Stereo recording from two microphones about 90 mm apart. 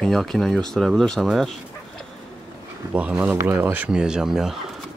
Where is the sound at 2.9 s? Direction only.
15° right (ahead or behind).